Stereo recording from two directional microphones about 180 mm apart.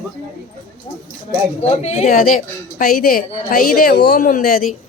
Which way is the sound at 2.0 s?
50° left (ahead or behind).